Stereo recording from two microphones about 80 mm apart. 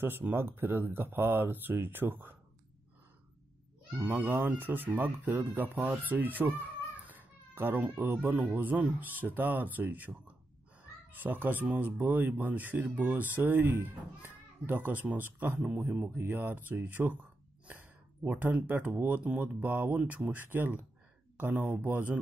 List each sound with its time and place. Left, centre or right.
0.0 s speech: right
4.0 s speech: right
15.6 s speech: centre
16.2 s speech: right